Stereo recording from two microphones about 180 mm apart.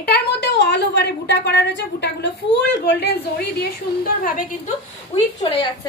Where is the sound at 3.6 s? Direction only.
55° left (ahead or behind).